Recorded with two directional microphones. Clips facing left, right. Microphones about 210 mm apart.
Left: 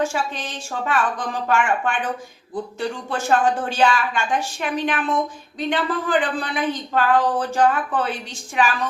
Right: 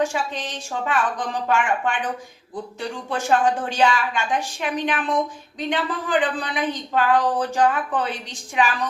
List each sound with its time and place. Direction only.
0.0 s a woman's voice: 15° right (ahead or behind)
3.1 s a woman's voice: 15° right (ahead or behind)